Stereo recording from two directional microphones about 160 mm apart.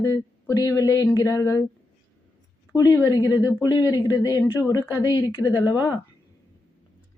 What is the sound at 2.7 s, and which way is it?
A woman's voice, 20° left (ahead or behind).